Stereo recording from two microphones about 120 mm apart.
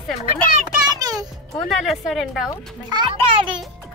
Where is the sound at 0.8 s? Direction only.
30° right (ahead or behind).